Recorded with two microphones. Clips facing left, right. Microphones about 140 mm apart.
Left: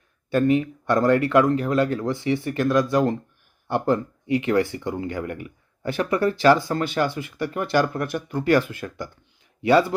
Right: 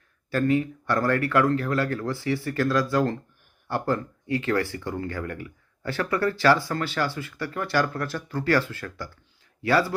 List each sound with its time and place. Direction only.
0.3 s speech: 20° left (ahead or behind)